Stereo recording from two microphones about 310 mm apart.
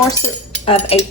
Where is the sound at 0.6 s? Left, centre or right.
Centre.